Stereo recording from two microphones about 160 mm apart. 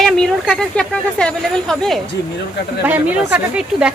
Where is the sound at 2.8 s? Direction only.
10° right (ahead or behind).